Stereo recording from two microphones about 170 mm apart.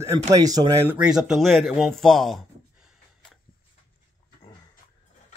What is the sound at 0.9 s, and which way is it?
Speech, 5° right (ahead or behind).